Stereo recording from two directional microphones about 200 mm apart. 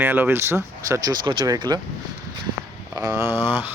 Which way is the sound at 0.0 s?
10° right (ahead or behind).